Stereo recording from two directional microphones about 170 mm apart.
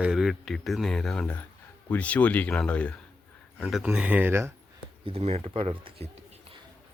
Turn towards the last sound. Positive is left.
turn(degrees=-35)  # may be behind; listen again after turning